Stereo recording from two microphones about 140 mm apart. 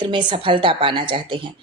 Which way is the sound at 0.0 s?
35° right (ahead or behind).